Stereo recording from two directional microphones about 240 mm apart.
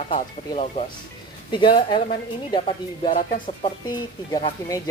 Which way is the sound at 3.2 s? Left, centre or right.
Left.